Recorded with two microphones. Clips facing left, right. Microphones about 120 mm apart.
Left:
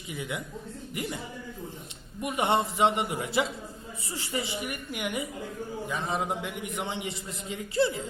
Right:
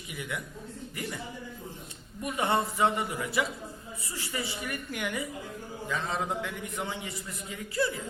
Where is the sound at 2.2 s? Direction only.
20° left (ahead or behind).